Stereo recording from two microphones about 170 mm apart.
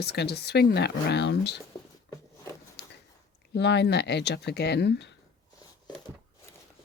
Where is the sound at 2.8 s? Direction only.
80° left.